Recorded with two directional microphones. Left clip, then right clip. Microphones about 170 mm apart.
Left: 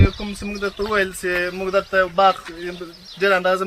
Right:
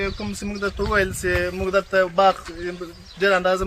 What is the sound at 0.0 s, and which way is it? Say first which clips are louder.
A man's voice: left 3 dB; 5° right (ahead or behind).